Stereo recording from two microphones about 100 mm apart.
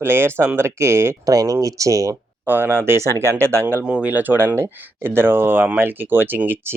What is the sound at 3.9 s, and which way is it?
Speech, 15° right (ahead or behind).